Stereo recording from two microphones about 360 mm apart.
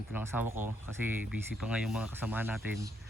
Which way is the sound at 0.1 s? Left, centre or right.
Centre.